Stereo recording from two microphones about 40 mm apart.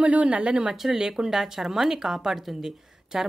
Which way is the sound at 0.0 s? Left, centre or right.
Right.